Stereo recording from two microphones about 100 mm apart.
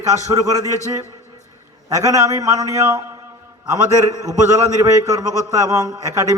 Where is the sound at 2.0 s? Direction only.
35° right (ahead or behind).